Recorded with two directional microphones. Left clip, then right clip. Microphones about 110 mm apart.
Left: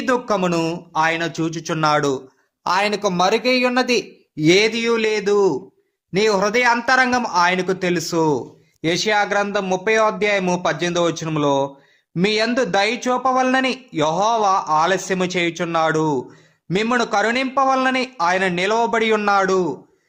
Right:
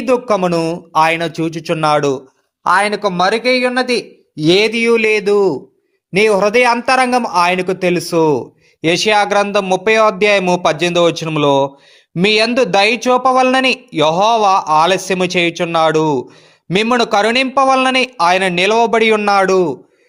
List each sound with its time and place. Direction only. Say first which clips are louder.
0.0 s a man's voice: right 5 dB; 35° right (ahead or behind)
2.6 s speech: right 6 dB; 20° right (ahead or behind)
4.4 s a man's voice: right 4 dB; 25° right (ahead or behind); by 19.7 s 45° right (ahead or behind)